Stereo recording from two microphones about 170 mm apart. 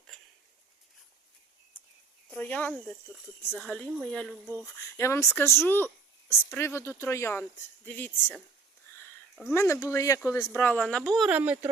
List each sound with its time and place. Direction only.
2.3 s speech: 10° left (ahead or behind)
4.5 s speech: 15° left (ahead or behind)
8.9 s a sound: 15° left (ahead or behind)
9.3 s speech: centre (ahead or behind)
9.6 s speech: 15° left (ahead or behind)
11.3 s speech: 10° right (ahead or behind)